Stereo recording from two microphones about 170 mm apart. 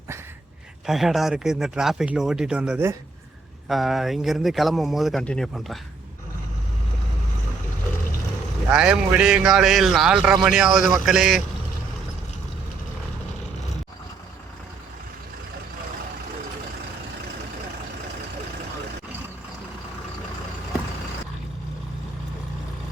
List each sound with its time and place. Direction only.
0.9 s speech: centre (ahead or behind)
8.7 s speech: 5° right (ahead or behind)